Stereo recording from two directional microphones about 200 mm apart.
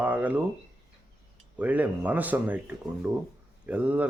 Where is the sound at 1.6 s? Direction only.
5° right (ahead or behind).